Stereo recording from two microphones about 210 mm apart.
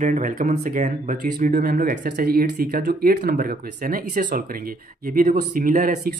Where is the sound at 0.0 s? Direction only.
40° right (ahead or behind).